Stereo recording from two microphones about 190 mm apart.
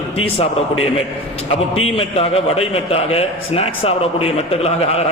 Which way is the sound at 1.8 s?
30° left (ahead or behind).